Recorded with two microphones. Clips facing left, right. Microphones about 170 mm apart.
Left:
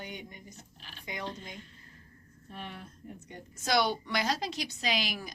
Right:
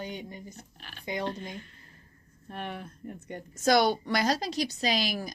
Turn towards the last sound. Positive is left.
turn(degrees=-40)  # may be behind; listen again after turning